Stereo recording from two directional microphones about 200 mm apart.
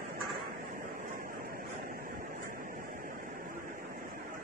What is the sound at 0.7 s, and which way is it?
Vehicle, 45° right (ahead or behind).